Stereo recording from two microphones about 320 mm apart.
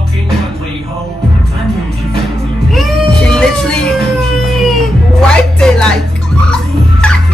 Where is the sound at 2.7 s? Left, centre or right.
Centre.